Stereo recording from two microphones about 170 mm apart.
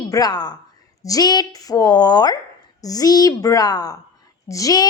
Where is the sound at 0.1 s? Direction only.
25° left (ahead or behind).